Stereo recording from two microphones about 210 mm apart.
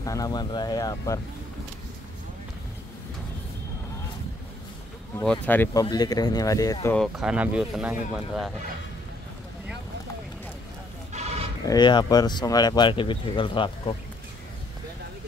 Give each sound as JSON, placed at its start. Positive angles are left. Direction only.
{"t": 0.0, "sound": "speech", "side_deg": 15}
{"t": 5.2, "sound": "speech", "side_deg": 5}
{"t": 7.0, "sound": "speech", "side_deg": -5}
{"t": 11.1, "sound": "sheep", "side_deg": -30}
{"t": 11.6, "sound": "speech", "side_deg": 20}